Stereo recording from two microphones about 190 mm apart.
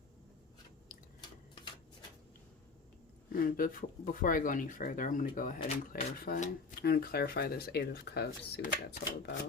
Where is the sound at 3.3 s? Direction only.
50° left (ahead or behind).